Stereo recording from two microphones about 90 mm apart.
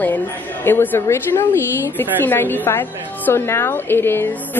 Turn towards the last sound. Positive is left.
turn(degrees=25)  # may be behind; listen again after turning